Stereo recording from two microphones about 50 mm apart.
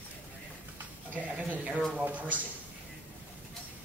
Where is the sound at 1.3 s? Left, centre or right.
Right.